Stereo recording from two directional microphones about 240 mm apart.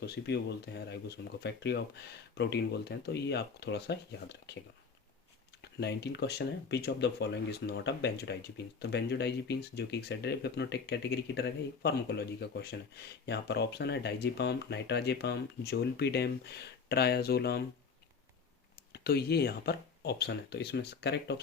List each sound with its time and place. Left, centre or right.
0.0 s speech: left
5.6 s speech: left
18.9 s speech: left